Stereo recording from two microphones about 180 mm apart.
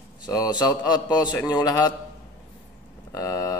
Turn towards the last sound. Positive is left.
turn(degrees=20)  # may be behind; listen again after turning